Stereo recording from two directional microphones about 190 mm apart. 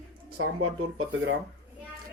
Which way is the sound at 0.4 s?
90° right.